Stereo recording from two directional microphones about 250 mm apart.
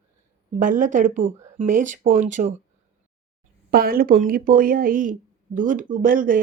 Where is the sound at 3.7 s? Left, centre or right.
Right.